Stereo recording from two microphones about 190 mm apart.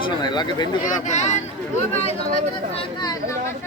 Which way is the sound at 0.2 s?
20° left (ahead or behind).